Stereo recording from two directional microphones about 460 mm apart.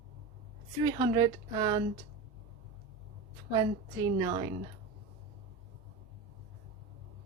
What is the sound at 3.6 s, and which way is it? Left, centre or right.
Speech, centre.